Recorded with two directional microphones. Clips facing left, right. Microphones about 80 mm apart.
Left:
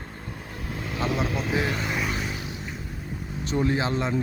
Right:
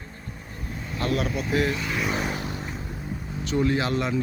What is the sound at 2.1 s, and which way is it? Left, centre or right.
Vehicle, right.